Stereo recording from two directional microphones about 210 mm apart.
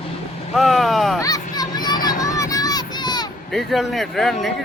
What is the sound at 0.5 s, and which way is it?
Speech, centre (ahead or behind).